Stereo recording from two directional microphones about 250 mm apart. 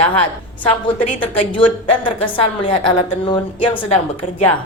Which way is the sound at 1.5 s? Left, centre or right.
Centre.